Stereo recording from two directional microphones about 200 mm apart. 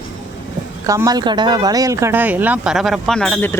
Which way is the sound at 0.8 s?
15° right (ahead or behind).